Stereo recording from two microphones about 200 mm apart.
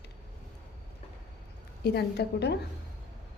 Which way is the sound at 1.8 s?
55° left (ahead or behind).